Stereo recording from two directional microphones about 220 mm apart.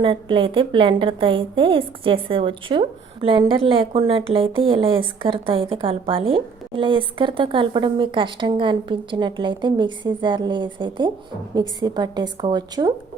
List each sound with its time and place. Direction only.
0.0 s a woman's voice: 20° right (ahead or behind)